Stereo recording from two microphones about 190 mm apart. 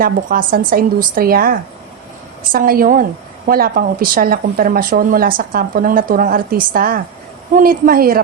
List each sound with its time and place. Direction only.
0.0 s a woman's voice: 50° right (ahead or behind)